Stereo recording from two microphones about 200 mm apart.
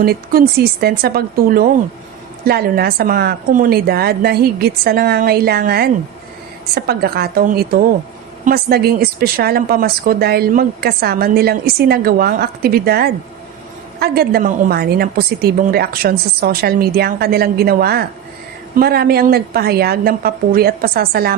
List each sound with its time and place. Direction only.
0.0 s speech: 50° right (ahead or behind)